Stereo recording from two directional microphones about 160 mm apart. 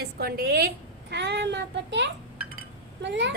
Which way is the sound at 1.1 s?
90° right.